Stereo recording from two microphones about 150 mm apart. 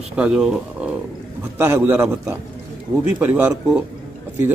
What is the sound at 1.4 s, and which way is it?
Speech, 15° right (ahead or behind).